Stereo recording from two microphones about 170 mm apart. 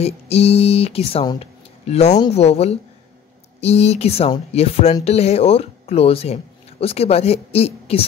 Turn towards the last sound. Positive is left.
turn(degrees=35)  # may be behind; listen again after turning